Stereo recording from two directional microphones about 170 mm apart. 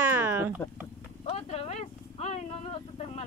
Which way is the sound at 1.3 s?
40° left (ahead or behind).